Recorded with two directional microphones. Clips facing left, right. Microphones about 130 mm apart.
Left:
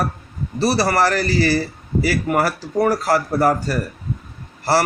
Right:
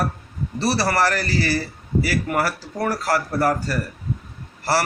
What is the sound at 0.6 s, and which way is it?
Speech, 15° left (ahead or behind).